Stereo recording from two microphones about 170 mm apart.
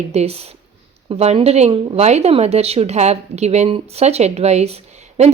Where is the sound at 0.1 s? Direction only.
40° right (ahead or behind).